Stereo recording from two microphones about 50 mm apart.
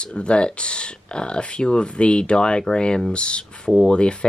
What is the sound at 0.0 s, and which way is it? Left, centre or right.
Speech, left.